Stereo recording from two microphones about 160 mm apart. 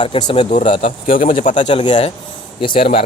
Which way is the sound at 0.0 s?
30° left (ahead or behind).